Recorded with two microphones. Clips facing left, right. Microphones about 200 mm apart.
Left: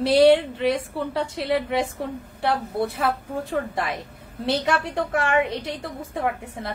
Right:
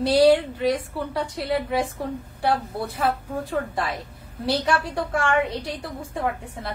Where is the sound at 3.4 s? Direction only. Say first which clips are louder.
Even; 20° left (ahead or behind).